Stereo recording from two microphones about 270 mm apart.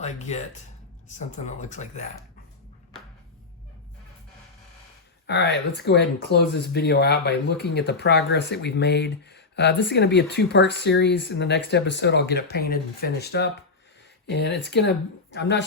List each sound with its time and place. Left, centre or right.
0.0 s speech: left
5.2 s speech: left